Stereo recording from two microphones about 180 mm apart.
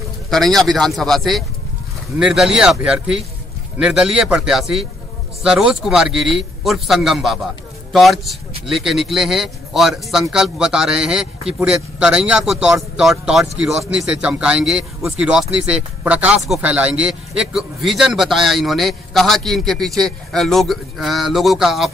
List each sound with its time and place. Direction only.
0.3 s a man's voice: centre (ahead or behind)